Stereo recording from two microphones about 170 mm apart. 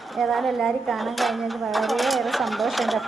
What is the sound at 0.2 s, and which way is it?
Speech, centre (ahead or behind).